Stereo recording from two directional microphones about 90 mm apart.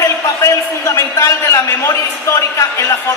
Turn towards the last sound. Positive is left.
turn(degrees=35)  # may be behind; listen again after turning